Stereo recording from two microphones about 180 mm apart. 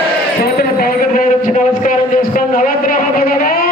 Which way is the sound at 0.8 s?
50° left (ahead or behind).